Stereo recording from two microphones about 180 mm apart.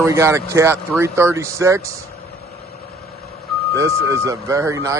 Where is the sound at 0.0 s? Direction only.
15° right (ahead or behind).